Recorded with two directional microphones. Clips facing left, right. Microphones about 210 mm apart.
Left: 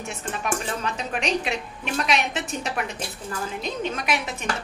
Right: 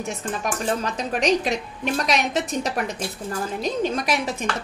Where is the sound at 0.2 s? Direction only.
40° right (ahead or behind).